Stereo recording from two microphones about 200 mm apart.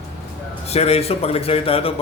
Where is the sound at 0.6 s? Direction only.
30° left (ahead or behind).